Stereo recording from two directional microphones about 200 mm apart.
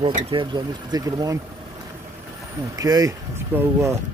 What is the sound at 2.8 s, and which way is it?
Speech, 20° right (ahead or behind).